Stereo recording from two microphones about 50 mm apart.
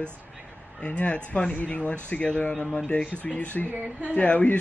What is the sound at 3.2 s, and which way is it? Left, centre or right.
Speech, left.